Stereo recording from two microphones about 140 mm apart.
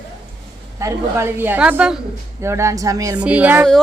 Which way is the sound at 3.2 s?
10° right (ahead or behind).